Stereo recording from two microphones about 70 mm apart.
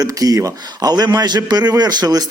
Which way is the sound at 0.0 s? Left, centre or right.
Right.